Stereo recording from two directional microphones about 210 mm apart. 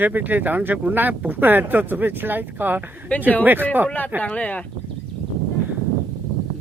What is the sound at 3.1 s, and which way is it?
Speech, 5° left (ahead or behind).